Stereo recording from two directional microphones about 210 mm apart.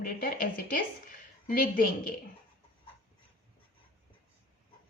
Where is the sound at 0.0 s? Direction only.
40° left (ahead or behind).